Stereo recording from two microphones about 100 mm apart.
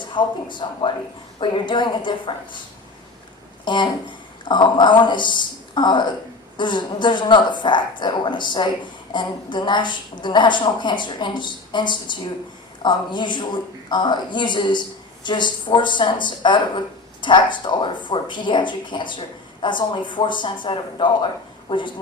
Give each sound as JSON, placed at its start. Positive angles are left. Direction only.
{"t": 0.0, "sound": "speech", "side_deg": 50}
{"t": 3.7, "sound": "speech", "side_deg": 50}